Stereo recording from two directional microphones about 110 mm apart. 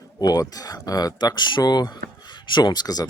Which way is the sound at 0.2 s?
35° left (ahead or behind).